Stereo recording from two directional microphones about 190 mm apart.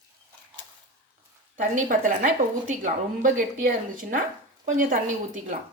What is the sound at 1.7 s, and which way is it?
A woman's voice, 40° right (ahead or behind).